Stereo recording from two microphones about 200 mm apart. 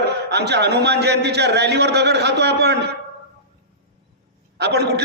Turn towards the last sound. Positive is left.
turn(degrees=-55)  # may be behind; listen again after turning